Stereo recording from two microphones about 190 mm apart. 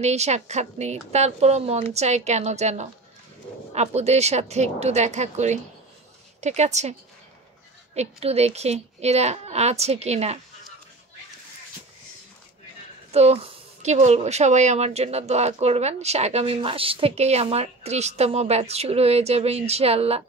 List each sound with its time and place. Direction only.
0.0 s speech: 35° right (ahead or behind)
13.1 s speech: 35° right (ahead or behind)